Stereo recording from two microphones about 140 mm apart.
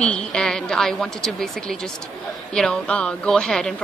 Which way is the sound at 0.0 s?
5° left (ahead or behind).